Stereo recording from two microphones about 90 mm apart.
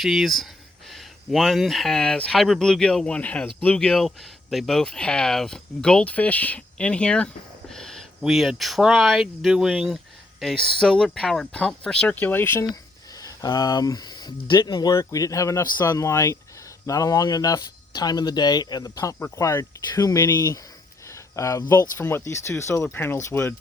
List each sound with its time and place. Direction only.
0.0 s speech: centre (ahead or behind); by 3.4 s 15° left (ahead or behind)
3.8 s speech: 5° left (ahead or behind)
7.7 s a sound: 5° left (ahead or behind)
8.2 s speech: centre (ahead or behind); by 12.6 s 25° left (ahead or behind)
13.1 s speech: 45° left (ahead or behind)
19.2 s speech: 30° left (ahead or behind)
21.1 s cricket: 35° left (ahead or behind)
21.9 s speech: 25° left (ahead or behind)